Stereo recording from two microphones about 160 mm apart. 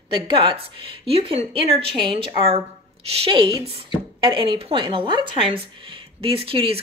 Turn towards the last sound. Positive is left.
turn(degrees=-35)  # may be behind; listen again after turning